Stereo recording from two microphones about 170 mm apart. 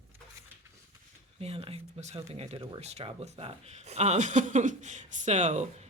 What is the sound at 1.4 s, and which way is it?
Speech, 35° right (ahead or behind).